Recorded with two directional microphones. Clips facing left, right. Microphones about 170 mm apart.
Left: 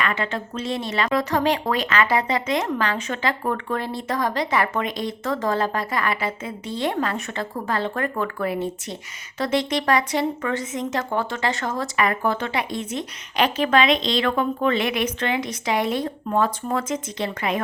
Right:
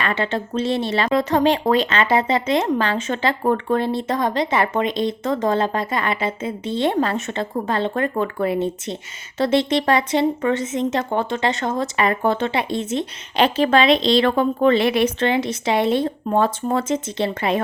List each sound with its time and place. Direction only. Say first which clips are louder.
0.0 s speech: right 3 dB; 30° right (ahead or behind)